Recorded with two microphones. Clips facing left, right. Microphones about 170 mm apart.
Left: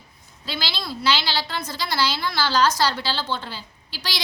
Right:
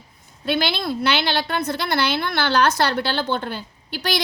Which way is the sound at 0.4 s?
55° right (ahead or behind).